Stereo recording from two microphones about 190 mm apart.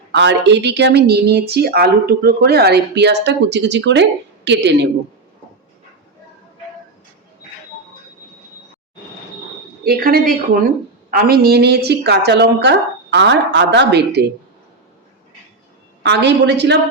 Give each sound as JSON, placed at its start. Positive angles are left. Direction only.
{"t": 0.1, "sound": "speech", "side_deg": -65}
{"t": 9.8, "sound": "a woman's voice", "side_deg": -50}
{"t": 16.0, "sound": "speech", "side_deg": -65}